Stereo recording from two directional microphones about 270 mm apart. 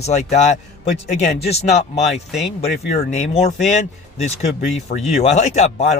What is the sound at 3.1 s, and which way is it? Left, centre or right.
Speech, left.